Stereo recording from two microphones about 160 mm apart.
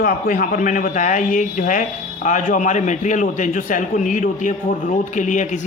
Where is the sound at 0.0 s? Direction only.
55° left (ahead or behind).